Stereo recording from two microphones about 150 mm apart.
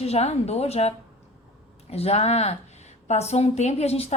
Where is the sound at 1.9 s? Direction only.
45° left (ahead or behind).